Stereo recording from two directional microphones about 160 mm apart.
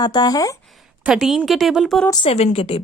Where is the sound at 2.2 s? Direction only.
40° left (ahead or behind).